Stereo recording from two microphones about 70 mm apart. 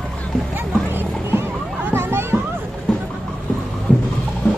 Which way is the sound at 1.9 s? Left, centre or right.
Right.